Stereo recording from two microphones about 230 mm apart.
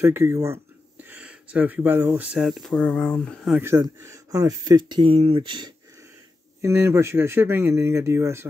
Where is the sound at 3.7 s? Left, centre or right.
Centre.